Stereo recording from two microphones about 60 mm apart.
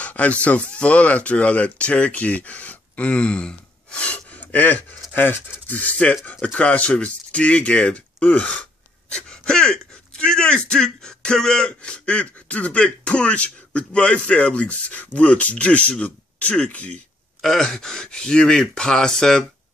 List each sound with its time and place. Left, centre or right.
0.0 s speech: left
5.8 s speech: left
17.4 s speech: centre